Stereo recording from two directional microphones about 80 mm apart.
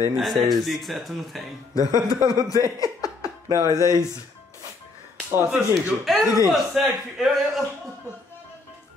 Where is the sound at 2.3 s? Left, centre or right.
Left.